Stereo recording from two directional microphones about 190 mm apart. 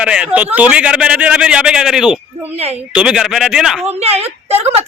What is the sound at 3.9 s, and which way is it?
Speech, 35° right (ahead or behind).